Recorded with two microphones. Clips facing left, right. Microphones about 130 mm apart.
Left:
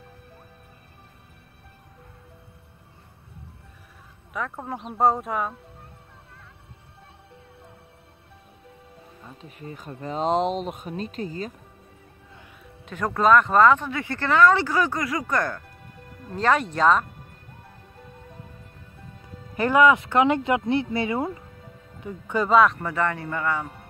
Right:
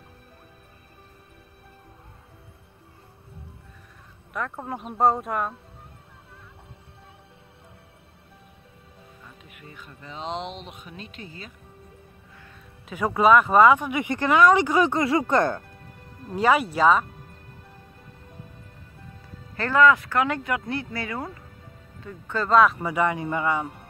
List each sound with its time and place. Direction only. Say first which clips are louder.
4.3 s speech: even; centre (ahead or behind)
9.2 s speech: left 8 dB; 30° left (ahead or behind)
12.8 s speech: right 1 dB; 10° right (ahead or behind); by 15.6 s 25° right (ahead or behind)
16.3 s speech: right 1 dB; 10° right (ahead or behind)
19.5 s speech: left 1 dB; 15° left (ahead or behind)
22.6 s speech: right 3 dB; 5° right (ahead or behind)